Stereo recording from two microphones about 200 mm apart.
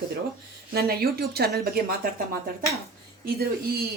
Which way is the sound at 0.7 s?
50° right (ahead or behind).